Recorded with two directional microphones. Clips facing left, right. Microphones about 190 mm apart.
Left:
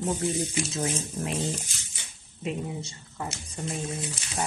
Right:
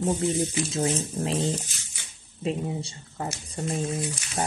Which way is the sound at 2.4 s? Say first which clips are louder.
Right 3 dB; 30° right (ahead or behind).